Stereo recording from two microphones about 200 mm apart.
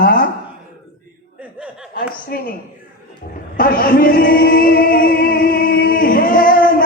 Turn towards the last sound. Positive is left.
turn(degrees=45)  # may be behind; listen again after turning